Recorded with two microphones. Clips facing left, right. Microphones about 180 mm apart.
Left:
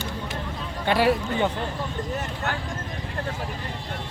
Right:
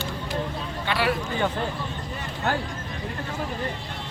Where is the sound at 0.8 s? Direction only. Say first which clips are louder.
Left 5 dB; 45° left (ahead or behind).